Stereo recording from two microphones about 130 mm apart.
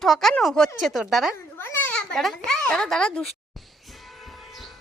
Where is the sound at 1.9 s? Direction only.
5° left (ahead or behind).